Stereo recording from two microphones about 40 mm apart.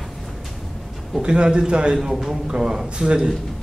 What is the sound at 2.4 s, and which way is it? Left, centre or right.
Speech, centre.